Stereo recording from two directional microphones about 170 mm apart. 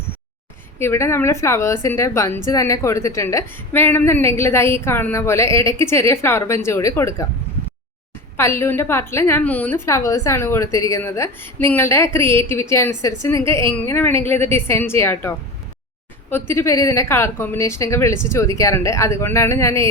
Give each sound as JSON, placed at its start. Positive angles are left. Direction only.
{"t": 0.8, "sound": "a woman's voice", "side_deg": 15}
{"t": 8.4, "sound": "a woman's voice", "side_deg": 15}